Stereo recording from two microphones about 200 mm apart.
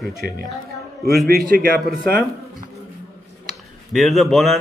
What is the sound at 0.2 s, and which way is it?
A man's voice, 50° right (ahead or behind).